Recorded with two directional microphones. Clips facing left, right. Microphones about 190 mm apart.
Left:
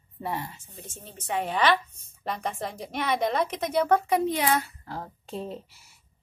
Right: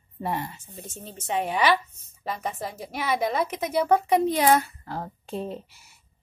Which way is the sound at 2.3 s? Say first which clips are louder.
Even; centre (ahead or behind).